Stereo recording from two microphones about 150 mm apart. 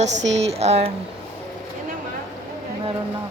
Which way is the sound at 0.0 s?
45° right (ahead or behind).